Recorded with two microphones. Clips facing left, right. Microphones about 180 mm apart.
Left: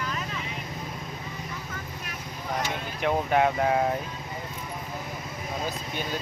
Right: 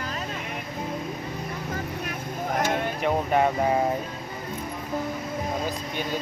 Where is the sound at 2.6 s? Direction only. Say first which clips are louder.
Right 9 dB; 50° right (ahead or behind).